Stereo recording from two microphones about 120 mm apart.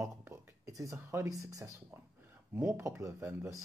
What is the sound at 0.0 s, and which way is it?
Speech, 25° right (ahead or behind).